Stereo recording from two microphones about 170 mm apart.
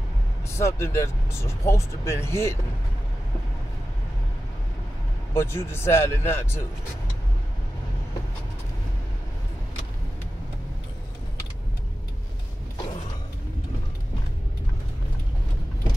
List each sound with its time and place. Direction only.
0.5 s speech: 15° left (ahead or behind)
5.3 s speech: 15° left (ahead or behind)